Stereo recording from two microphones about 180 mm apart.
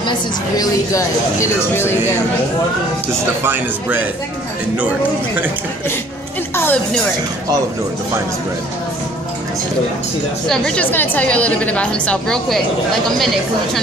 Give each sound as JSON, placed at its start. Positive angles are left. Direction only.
{"t": 0.6, "sound": "a woman's voice", "side_deg": 15}
{"t": 3.4, "sound": "speech", "side_deg": -10}
{"t": 6.5, "sound": "music", "side_deg": 10}
{"t": 10.5, "sound": "a woman's voice", "side_deg": 5}